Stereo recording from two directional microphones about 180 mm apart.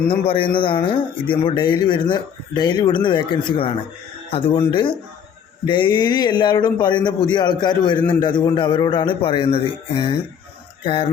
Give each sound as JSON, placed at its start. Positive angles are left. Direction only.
{"t": 0.1, "sound": "speech", "side_deg": 30}
{"t": 10.8, "sound": "speech", "side_deg": 30}